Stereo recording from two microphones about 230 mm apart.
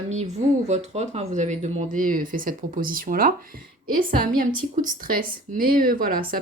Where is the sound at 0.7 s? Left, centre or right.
Right.